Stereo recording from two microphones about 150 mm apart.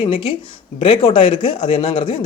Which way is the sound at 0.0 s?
35° left (ahead or behind).